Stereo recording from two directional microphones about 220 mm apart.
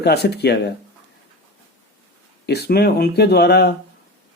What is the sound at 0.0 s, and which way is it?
Speech, 50° left (ahead or behind).